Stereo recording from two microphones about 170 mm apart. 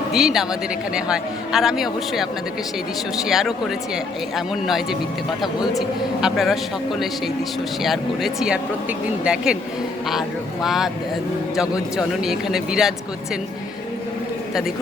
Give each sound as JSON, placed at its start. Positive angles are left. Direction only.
{"t": 0.1, "sound": "speech", "side_deg": 0}
{"t": 3.2, "sound": "speech", "side_deg": 0}
{"t": 6.2, "sound": "speech", "side_deg": 0}
{"t": 7.9, "sound": "speech", "side_deg": 0}